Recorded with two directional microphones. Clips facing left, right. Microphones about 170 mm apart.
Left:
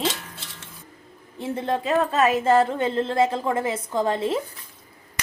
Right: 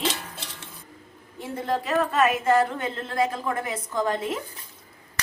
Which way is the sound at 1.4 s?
25° left (ahead or behind).